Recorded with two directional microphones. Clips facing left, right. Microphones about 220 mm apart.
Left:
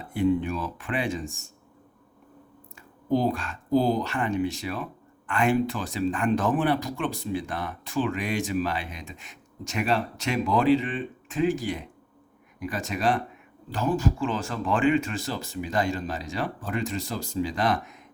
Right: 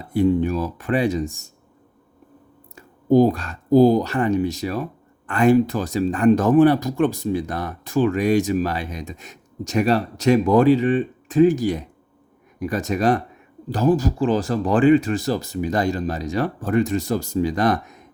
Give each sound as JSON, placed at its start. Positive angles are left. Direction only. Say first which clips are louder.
{"t": 0.1, "sound": "speech", "louder": "right 6 dB", "side_deg": -40}
{"t": 2.7, "sound": "speech", "louder": "right 10 dB", "side_deg": -45}